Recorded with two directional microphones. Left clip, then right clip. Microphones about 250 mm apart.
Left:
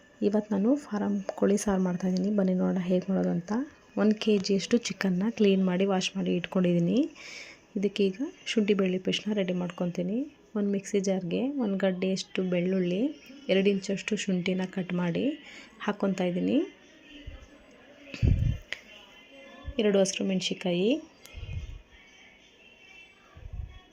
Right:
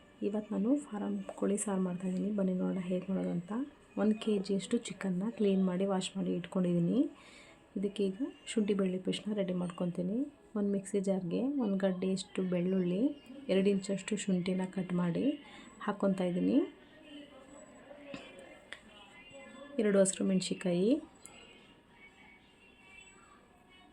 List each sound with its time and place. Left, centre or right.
0.2 s speech: left
18.1 s music: centre
18.7 s music: centre
19.7 s speech: centre